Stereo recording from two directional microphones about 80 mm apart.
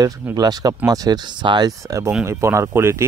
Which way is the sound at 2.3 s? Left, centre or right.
Right.